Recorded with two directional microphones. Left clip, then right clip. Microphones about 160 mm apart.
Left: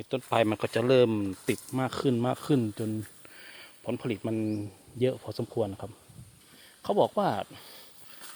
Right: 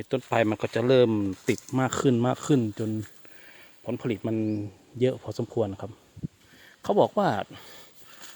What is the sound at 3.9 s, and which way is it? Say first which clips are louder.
Speech: right 4 dB; 25° right (ahead or behind).